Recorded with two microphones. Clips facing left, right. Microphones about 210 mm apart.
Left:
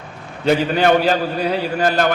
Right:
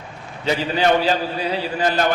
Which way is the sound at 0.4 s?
55° left (ahead or behind).